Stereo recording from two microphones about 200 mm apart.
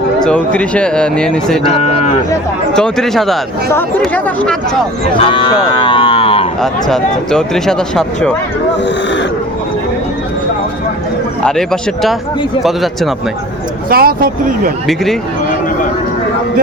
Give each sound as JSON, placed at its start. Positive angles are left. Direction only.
{"t": 0.3, "sound": "speech", "side_deg": 5}
{"t": 1.7, "sound": "speech", "side_deg": 30}
{"t": 2.7, "sound": "speech", "side_deg": 5}
{"t": 5.2, "sound": "cattle", "side_deg": 25}
{"t": 6.6, "sound": "speech", "side_deg": 0}
{"t": 11.4, "sound": "speech", "side_deg": 5}
{"t": 13.9, "sound": "speech", "side_deg": -50}
{"t": 14.8, "sound": "speech", "side_deg": 0}